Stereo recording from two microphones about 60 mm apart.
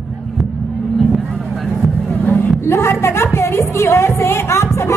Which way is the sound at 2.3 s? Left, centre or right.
Left.